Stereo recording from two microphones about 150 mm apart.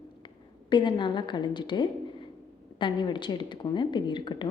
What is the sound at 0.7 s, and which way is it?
A woman's voice, 30° left (ahead or behind).